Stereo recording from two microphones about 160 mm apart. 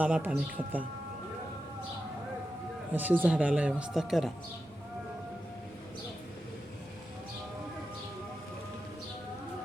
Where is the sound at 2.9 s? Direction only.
10° right (ahead or behind).